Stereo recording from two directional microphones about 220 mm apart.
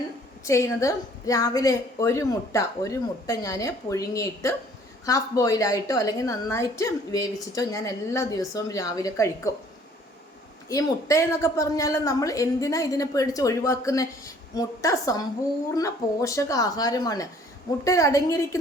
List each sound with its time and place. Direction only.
0.4 s a woman's voice: 15° left (ahead or behind)
10.7 s a woman's voice: 15° left (ahead or behind)